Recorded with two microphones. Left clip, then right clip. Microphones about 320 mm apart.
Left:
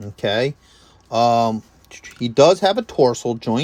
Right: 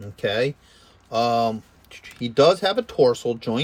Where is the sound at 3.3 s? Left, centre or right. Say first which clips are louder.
Left 2 dB; left.